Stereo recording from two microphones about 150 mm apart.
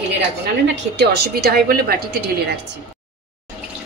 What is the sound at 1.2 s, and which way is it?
A woman's voice, 90° right.